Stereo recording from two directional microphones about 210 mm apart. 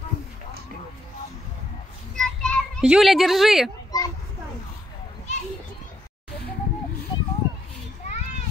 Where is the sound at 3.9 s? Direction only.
15° left (ahead or behind).